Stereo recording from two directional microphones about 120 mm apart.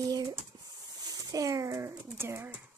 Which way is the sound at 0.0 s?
30° right (ahead or behind).